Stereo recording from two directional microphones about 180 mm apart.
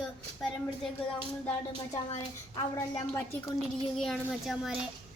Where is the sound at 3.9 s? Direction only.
Centre (ahead or behind).